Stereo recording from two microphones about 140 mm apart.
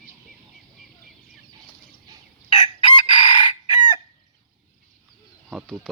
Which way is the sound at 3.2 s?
55° left (ahead or behind).